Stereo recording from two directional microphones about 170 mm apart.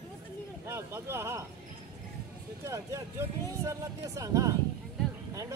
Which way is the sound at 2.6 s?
15° right (ahead or behind).